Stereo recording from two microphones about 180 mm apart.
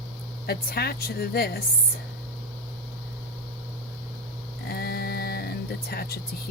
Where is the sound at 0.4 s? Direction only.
60° left (ahead or behind).